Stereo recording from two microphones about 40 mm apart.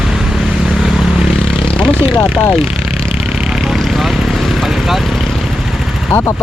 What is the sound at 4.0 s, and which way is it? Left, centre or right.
Vehicle, centre.